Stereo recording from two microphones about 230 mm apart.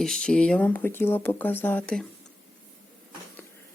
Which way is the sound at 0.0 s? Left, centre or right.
Centre.